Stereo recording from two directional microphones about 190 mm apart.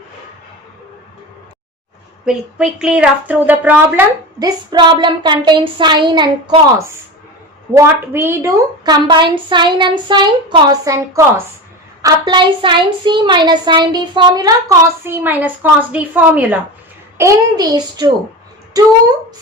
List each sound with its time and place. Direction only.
2.2 s a woman's voice: 5° right (ahead or behind)
4.4 s a child's voice: 20° right (ahead or behind)
7.7 s a woman's voice: 10° right (ahead or behind)